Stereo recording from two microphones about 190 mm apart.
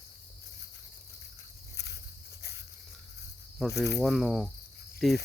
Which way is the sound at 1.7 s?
60° left (ahead or behind).